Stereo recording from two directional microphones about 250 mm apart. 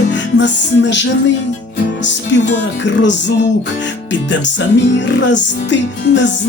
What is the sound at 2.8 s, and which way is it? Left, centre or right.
Music, left.